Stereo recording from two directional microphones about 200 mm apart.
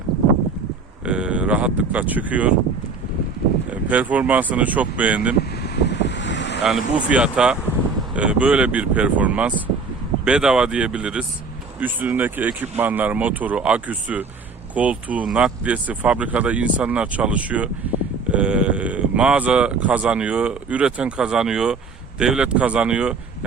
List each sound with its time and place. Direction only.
1.0 s speech: 5° right (ahead or behind)
3.7 s speech: 10° right (ahead or behind)
5.4 s wind: 55° left (ahead or behind)
6.6 s speech: centre (ahead or behind)